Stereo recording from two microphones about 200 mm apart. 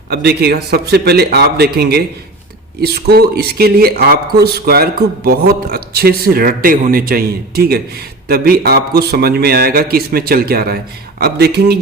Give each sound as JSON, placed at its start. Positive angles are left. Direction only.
{"t": 0.1, "sound": "speech", "side_deg": -55}